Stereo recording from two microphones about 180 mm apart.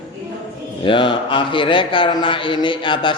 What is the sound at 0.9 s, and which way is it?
A man's voice, 30° left (ahead or behind).